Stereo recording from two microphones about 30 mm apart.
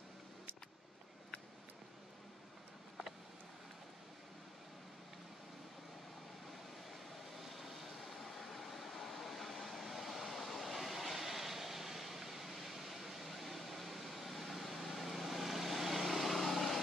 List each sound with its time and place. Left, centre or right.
7.3 s vehicle: centre